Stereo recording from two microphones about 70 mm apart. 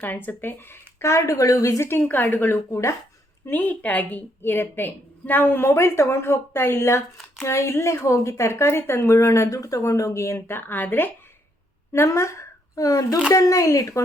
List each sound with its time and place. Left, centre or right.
0.0 s a woman's voice: left
1.8 s speech: left
2.6 s speech: left
3.5 s a woman's voice: left
10.3 s speech: left
11.9 s a woman's voice: left